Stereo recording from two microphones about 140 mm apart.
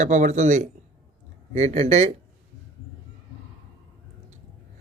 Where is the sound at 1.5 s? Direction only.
50° right (ahead or behind).